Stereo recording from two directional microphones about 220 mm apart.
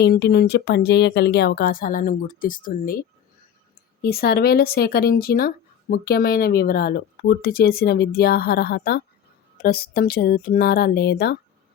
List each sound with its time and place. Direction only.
0.0 s speech: 50° left (ahead or behind)
4.0 s speech: 45° left (ahead or behind)